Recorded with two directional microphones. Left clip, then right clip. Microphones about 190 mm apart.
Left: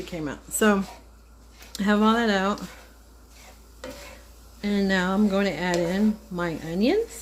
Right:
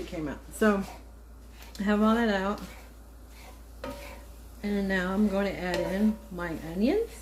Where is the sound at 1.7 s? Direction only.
65° left (ahead or behind).